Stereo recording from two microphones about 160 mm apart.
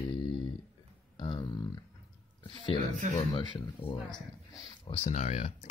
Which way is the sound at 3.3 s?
30° left (ahead or behind).